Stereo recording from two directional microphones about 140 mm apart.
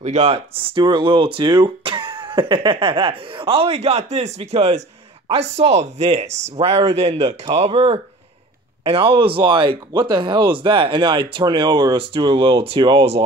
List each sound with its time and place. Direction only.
0.0 s speech: 55° right (ahead or behind)